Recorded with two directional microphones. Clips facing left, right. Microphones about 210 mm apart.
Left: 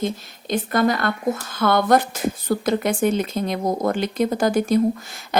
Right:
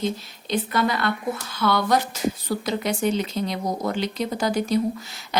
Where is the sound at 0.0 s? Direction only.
50° left (ahead or behind).